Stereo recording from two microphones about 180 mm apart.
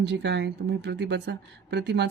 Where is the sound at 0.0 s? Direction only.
70° right (ahead or behind).